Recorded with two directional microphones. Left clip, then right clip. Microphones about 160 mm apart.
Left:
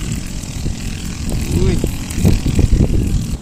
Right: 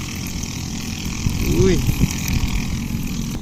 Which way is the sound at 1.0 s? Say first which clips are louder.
Right 1 dB; 65° left (ahead or behind).